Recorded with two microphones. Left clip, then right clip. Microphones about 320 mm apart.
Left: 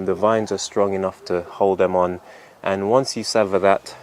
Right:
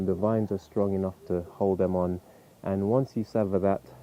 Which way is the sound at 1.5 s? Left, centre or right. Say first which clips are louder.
Left 9 dB; left.